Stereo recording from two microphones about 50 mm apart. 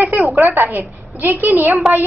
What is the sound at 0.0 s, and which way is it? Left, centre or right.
A woman's voice, right.